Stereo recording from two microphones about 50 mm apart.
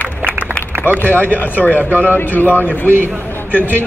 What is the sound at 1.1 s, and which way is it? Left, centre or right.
Speech, left.